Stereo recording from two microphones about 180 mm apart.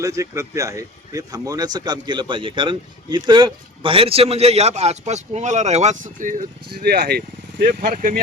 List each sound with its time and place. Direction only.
0.0 s a man's voice: 15° right (ahead or behind); by 8.2 s 55° right (ahead or behind)